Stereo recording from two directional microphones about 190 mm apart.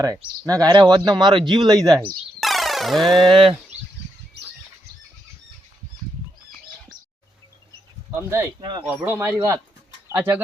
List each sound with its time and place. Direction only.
0.4 s speech: 20° right (ahead or behind)
2.4 s music: centre (ahead or behind)
3.2 s speech: 30° right (ahead or behind)
8.1 s speech: 10° right (ahead or behind)